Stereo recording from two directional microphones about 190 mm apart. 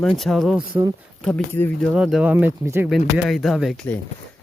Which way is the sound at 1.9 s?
5° right (ahead or behind).